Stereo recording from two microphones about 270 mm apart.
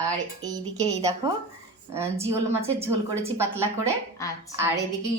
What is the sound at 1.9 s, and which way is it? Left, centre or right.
Speech, centre.